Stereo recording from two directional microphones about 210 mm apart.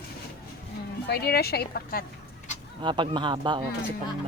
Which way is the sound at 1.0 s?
50° left (ahead or behind).